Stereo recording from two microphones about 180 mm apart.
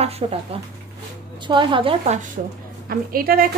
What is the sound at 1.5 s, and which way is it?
Speech, 25° right (ahead or behind).